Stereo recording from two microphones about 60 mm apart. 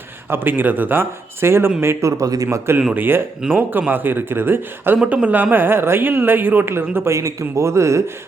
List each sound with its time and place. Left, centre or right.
0.3 s a man's voice: right
2.0 s a man's voice: right
2.9 s speech: right